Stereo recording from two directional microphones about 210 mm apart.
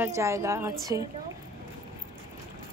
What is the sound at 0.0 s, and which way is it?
A woman's voice, 15° right (ahead or behind).